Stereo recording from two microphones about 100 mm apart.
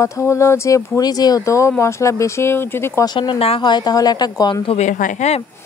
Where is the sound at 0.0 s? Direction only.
30° left (ahead or behind).